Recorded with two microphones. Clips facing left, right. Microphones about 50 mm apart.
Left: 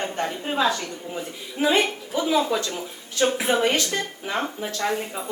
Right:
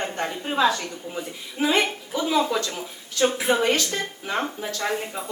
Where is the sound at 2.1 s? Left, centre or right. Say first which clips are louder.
Left 1 dB; centre.